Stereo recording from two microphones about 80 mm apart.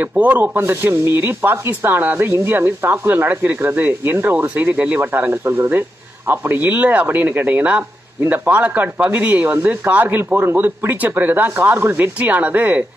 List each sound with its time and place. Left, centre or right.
0.0 s speech: centre